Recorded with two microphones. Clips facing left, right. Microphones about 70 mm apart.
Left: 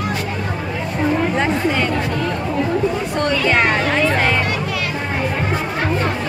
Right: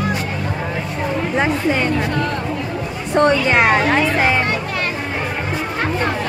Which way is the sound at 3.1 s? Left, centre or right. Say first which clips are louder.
Right 9 dB; right.